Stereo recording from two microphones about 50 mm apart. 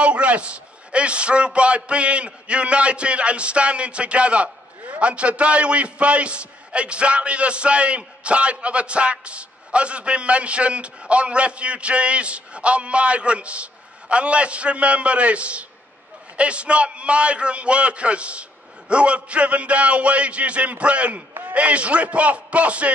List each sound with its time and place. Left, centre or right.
0.0 s a man's voice: right